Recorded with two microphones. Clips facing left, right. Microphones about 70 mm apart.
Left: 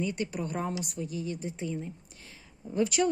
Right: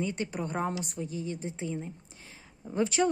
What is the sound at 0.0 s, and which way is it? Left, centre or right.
A woman's voice, right.